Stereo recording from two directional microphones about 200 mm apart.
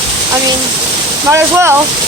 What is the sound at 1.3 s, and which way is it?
Speech, 15° right (ahead or behind).